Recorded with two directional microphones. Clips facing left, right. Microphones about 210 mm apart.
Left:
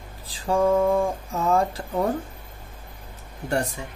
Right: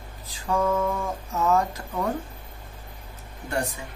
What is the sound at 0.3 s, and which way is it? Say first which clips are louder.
Speech: left 4 dB; 30° left (ahead or behind).